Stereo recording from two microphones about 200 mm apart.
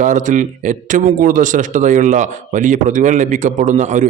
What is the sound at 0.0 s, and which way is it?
Speech, 40° right (ahead or behind).